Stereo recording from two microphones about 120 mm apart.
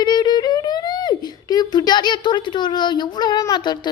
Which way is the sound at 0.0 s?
35° left (ahead or behind).